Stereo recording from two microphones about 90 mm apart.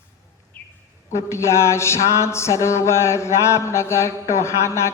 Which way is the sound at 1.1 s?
30° left (ahead or behind).